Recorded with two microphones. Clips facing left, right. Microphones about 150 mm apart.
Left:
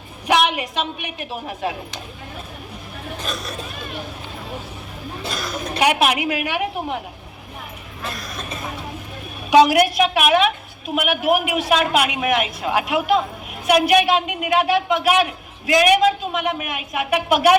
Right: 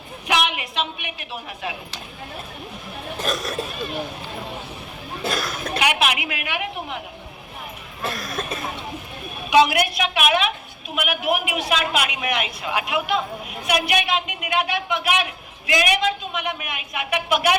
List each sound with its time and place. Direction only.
0.3 s speech: 45° left (ahead or behind)
3.2 s speech: 45° right (ahead or behind)
5.2 s speech: 50° right (ahead or behind)
5.8 s a man's voice: 40° left (ahead or behind)
8.0 s speech: 50° right (ahead or behind)
9.5 s a man's voice: 40° left (ahead or behind)